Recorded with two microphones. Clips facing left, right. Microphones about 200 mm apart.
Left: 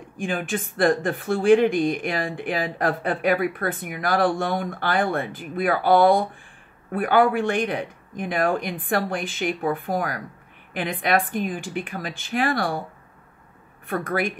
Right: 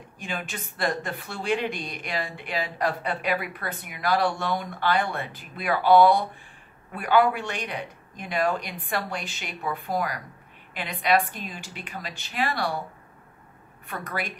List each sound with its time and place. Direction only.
0.2 s speech: 50° left (ahead or behind)
13.8 s speech: 50° left (ahead or behind)